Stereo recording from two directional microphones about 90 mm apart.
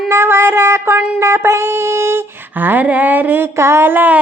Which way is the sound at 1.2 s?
30° right (ahead or behind).